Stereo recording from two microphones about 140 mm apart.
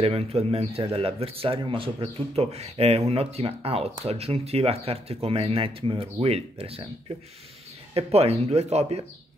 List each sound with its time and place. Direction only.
0.0 s speech: 45° right (ahead or behind)
7.9 s speech: 45° right (ahead or behind)